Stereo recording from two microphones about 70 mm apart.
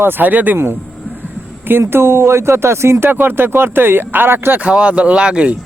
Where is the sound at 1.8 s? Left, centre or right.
Right.